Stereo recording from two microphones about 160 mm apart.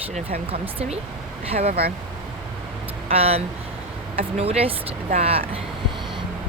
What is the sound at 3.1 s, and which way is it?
Speech, 40° right (ahead or behind).